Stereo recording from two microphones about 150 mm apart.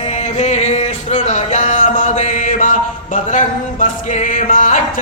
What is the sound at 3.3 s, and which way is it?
Music, 55° left (ahead or behind).